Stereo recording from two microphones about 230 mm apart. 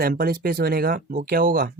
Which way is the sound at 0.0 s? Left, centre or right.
Right.